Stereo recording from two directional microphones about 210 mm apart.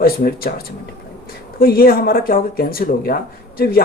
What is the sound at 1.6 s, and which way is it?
Speech, 45° left (ahead or behind).